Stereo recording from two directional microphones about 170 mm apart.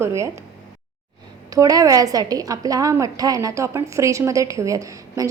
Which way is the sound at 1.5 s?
20° right (ahead or behind).